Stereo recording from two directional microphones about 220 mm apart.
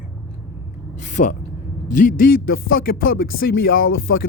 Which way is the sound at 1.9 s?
35° left (ahead or behind).